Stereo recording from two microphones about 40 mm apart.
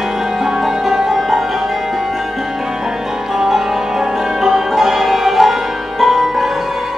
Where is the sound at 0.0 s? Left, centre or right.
Centre.